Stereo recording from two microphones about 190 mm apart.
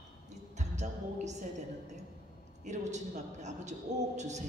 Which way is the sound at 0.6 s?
40° right (ahead or behind).